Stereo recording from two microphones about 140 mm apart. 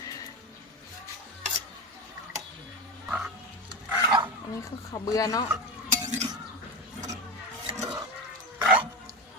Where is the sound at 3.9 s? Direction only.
10° right (ahead or behind).